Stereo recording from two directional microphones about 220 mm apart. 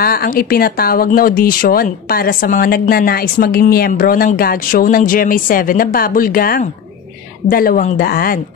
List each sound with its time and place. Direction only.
0.0 s speech: 45° left (ahead or behind)